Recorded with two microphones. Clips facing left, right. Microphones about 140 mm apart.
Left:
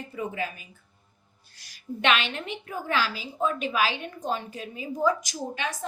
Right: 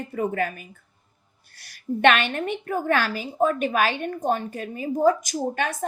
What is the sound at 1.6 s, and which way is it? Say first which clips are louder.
A woman's voice: right 7 dB; 55° right (ahead or behind).